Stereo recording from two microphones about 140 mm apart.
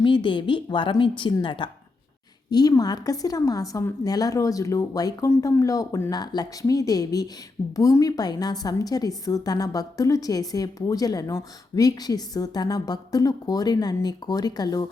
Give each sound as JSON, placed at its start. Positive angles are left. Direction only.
{"t": 0.0, "sound": "a woman's voice", "side_deg": 35}